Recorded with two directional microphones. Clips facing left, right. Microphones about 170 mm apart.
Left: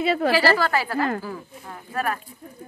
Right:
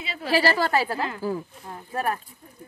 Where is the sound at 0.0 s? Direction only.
55° left (ahead or behind).